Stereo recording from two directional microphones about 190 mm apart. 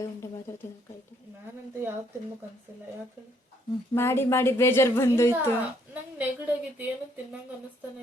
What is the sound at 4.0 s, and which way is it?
Speech, 15° left (ahead or behind).